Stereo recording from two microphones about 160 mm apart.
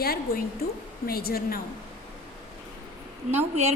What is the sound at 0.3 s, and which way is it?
A woman's voice, 70° left (ahead or behind).